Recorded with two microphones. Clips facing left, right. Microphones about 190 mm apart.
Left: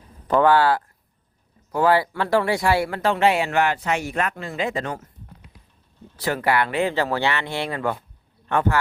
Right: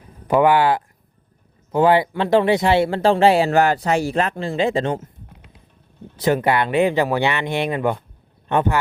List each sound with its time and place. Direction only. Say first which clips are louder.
0.3 s speech: right 2 dB; 15° right (ahead or behind)